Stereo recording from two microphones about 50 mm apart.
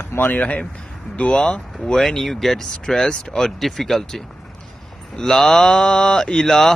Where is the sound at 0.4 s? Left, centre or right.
Left.